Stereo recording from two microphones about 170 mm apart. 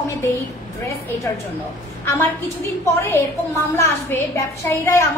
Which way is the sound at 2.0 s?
15° left (ahead or behind).